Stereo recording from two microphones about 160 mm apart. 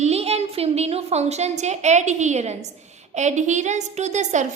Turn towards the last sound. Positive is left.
turn(degrees=-50)  # may be behind; listen again after turning